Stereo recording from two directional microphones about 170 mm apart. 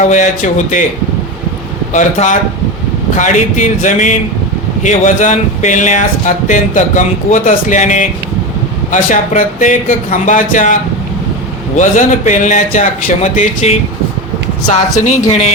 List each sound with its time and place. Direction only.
0.0 s speech: 45° left (ahead or behind)
1.9 s speech: 45° left (ahead or behind)
11.8 s speech: 45° left (ahead or behind)